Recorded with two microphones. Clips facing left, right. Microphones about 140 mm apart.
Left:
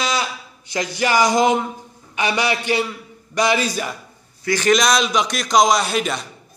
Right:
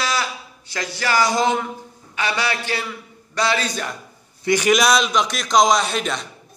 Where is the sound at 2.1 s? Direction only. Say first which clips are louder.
Left 3 dB; 20° left (ahead or behind).